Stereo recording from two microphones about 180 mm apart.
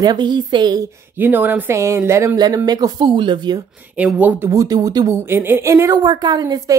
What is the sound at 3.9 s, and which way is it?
Speech, 5° right (ahead or behind).